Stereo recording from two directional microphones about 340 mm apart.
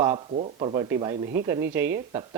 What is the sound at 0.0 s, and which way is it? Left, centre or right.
Speech, centre.